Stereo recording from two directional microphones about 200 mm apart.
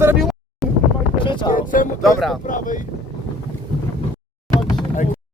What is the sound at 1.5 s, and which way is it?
Speech, 45° left (ahead or behind).